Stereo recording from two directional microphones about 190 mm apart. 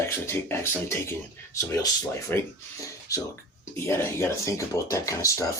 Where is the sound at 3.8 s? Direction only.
10° left (ahead or behind).